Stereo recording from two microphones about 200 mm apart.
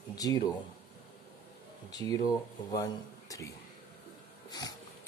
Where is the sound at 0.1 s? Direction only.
20° left (ahead or behind).